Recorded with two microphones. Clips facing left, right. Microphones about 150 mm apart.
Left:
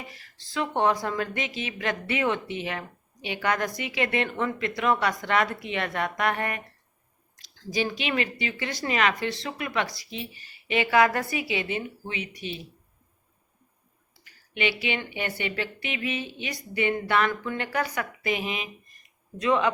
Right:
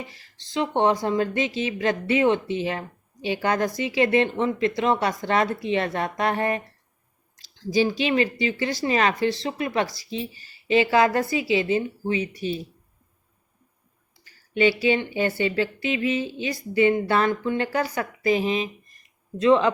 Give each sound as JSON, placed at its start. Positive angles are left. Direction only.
{"t": 0.0, "sound": "speech", "side_deg": -30}
{"t": 14.3, "sound": "speech", "side_deg": -35}